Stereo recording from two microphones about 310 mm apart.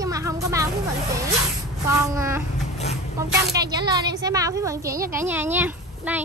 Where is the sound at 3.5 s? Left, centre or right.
Centre.